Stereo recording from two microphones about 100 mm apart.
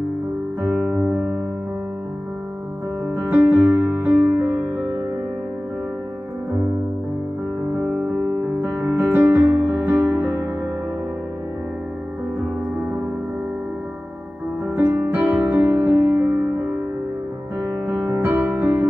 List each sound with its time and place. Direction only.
0.6 s music: 15° right (ahead or behind)
3.2 s music: 20° right (ahead or behind)
8.6 s music: 20° right (ahead or behind)
15.0 s music: 15° right (ahead or behind)
17.6 s music: 15° right (ahead or behind)